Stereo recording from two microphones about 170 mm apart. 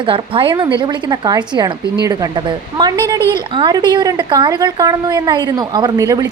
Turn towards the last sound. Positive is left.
turn(degrees=-20)  # may be behind; listen again after turning